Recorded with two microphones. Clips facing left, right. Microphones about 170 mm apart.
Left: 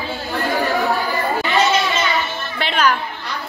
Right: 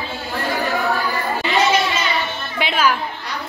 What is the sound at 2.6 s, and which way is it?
Music, 5° right (ahead or behind).